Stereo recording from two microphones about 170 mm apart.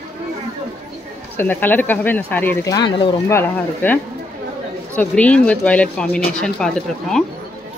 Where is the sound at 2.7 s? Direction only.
30° left (ahead or behind).